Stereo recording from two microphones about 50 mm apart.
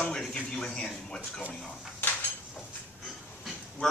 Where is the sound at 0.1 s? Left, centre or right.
Centre.